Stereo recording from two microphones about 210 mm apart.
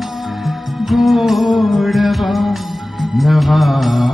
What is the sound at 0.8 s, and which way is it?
Music, centre (ahead or behind).